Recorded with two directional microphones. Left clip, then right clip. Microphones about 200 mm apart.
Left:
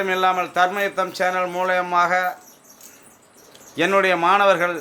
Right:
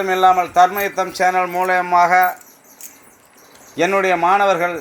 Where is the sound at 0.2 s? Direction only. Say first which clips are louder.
Right 8 dB; 10° right (ahead or behind).